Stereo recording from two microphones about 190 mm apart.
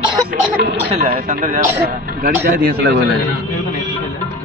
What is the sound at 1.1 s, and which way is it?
Speech, 45° right (ahead or behind).